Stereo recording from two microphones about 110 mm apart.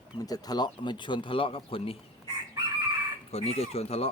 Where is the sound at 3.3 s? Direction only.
70° left (ahead or behind).